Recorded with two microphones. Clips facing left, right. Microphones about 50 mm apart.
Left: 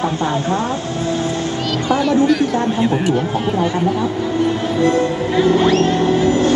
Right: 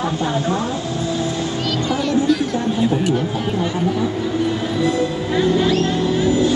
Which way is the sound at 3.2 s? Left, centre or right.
Left.